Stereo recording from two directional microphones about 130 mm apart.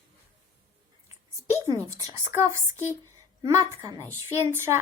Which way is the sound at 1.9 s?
25° right (ahead or behind).